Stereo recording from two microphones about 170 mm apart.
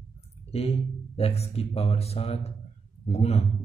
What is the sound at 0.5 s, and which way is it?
A man's voice, 35° left (ahead or behind).